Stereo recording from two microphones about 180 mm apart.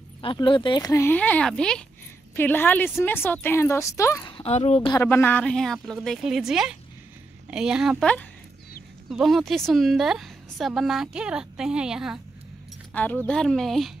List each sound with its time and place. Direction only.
0.2 s a woman's voice: 25° left (ahead or behind)
4.3 s a woman's voice: 35° left (ahead or behind)
5.0 s a woman's voice: 10° left (ahead or behind)
12.9 s a woman's voice: 10° left (ahead or behind)